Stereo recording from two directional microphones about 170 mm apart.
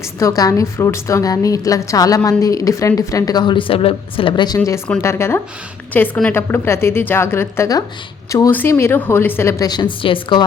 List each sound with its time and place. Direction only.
0.2 s a woman's voice: 20° left (ahead or behind)